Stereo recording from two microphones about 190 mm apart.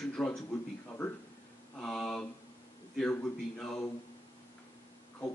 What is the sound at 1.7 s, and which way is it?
A man's voice, 5° left (ahead or behind).